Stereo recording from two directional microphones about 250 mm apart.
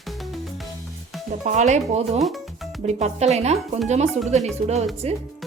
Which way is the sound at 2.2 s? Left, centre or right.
Centre.